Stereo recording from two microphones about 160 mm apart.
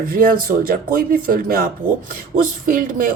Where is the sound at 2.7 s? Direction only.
55° right (ahead or behind).